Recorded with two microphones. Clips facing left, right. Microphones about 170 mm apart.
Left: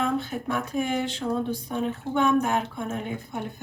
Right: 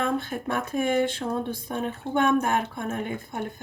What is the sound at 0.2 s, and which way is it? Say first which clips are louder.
Speech: even; 55° right (ahead or behind).